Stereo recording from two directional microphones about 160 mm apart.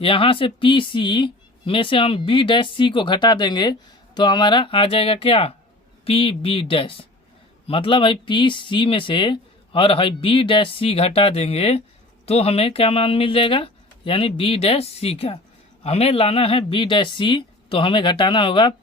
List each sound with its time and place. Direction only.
0.0 s speech: 35° left (ahead or behind)